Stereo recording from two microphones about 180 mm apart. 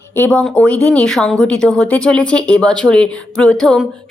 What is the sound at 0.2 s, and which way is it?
Speech, 5° left (ahead or behind).